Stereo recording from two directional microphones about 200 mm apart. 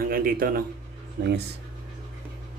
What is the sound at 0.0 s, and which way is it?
A man's voice, 45° right (ahead or behind).